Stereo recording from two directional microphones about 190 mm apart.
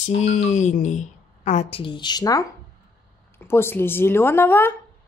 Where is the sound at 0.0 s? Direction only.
40° left (ahead or behind); by 4.7 s 10° left (ahead or behind).